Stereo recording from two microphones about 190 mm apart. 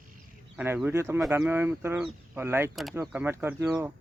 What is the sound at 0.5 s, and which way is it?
Speech, 10° right (ahead or behind).